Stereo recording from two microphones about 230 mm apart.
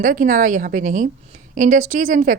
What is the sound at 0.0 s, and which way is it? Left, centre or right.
A woman's voice, right.